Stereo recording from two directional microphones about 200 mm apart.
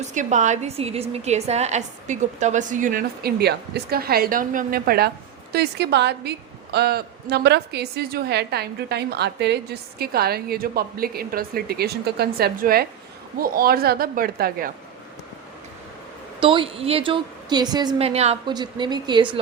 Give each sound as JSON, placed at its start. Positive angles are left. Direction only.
{"t": 0.0, "sound": "a woman's voice", "side_deg": -35}
{"t": 16.4, "sound": "a woman's voice", "side_deg": -25}